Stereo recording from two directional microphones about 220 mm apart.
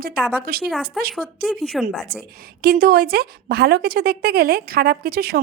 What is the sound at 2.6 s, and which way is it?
A woman's voice, 45° right (ahead or behind).